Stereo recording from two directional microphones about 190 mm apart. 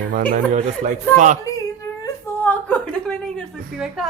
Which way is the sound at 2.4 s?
10° left (ahead or behind).